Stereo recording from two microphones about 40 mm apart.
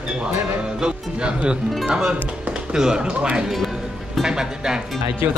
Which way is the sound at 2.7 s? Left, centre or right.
Centre.